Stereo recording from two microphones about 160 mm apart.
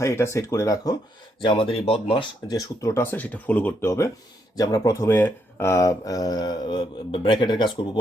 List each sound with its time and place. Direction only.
0.0 s speech: 15° left (ahead or behind)
1.5 s speech: 35° left (ahead or behind)
2.5 s speech: 20° left (ahead or behind)